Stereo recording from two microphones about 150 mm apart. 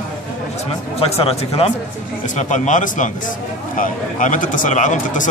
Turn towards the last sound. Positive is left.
turn(degrees=55)  # may be behind; listen again after turning